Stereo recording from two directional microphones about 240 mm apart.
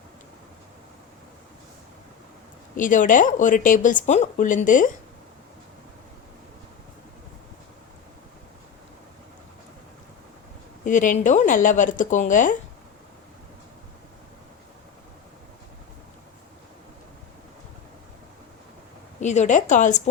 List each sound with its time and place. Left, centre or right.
2.7 s speech: left
10.8 s speech: left
19.2 s speech: left